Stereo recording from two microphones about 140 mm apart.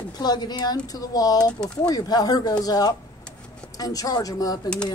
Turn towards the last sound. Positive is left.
turn(degrees=5)  # may be behind; listen again after turning